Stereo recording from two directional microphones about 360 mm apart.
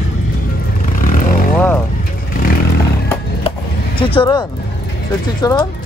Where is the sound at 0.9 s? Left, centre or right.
Left.